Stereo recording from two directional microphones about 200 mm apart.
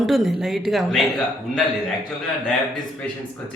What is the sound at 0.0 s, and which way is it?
A woman's voice, centre (ahead or behind).